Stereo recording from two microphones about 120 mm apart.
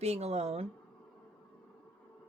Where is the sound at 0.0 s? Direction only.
60° right (ahead or behind).